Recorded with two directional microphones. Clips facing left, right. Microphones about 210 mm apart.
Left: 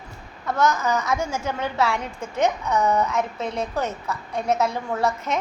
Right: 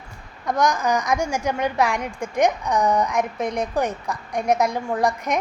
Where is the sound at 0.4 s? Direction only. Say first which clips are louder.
Right 1 dB; 15° right (ahead or behind).